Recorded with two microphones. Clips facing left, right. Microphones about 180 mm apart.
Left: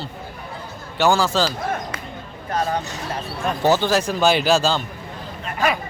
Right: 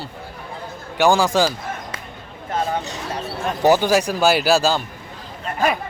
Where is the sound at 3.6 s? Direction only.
15° right (ahead or behind).